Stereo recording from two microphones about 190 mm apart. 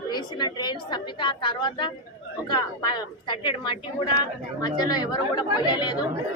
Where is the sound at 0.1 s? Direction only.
25° left (ahead or behind).